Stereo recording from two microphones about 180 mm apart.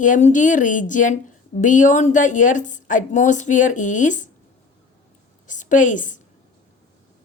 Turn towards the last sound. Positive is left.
turn(degrees=45)  # may be behind; listen again after turning